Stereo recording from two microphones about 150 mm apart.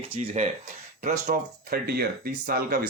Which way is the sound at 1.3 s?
90° right.